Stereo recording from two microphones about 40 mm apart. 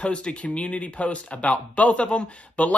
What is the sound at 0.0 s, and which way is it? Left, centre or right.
Speech, left.